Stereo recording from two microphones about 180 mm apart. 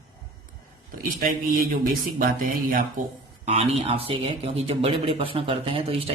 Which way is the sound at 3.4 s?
35° right (ahead or behind).